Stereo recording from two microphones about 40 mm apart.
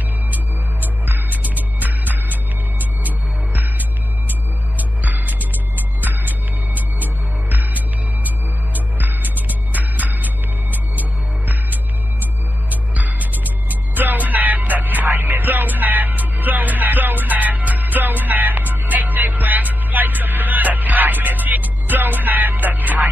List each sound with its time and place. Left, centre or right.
1.0 s music: right
12.9 s music: right